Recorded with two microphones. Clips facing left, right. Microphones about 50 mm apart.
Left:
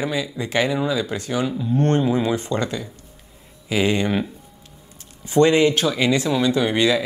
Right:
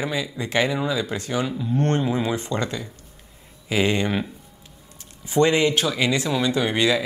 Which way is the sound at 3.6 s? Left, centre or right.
Right.